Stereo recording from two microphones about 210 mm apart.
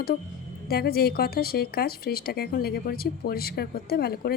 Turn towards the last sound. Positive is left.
turn(degrees=50)  # may be behind; listen again after turning